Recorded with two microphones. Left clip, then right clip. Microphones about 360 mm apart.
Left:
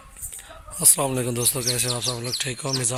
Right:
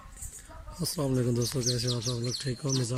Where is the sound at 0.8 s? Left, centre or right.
Centre.